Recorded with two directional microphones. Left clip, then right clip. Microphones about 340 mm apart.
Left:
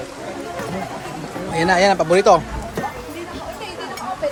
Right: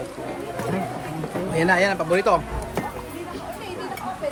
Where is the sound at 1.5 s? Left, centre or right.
Centre.